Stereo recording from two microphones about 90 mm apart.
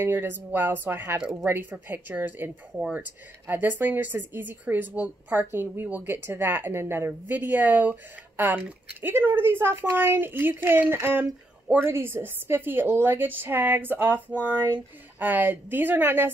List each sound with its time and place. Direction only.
0.0 s a woman's voice: 25° right (ahead or behind)